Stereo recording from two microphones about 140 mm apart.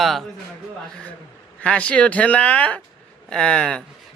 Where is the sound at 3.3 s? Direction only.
5° left (ahead or behind).